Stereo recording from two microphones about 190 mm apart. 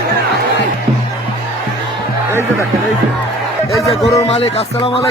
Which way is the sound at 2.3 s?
10° right (ahead or behind).